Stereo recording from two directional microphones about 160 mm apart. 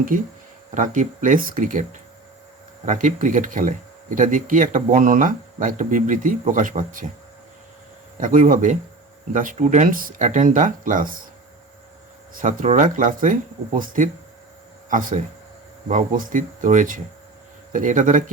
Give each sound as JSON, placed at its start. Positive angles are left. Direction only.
{"t": 0.1, "sound": "speech", "side_deg": -60}
{"t": 8.2, "sound": "speech", "side_deg": -55}
{"t": 12.3, "sound": "speech", "side_deg": -55}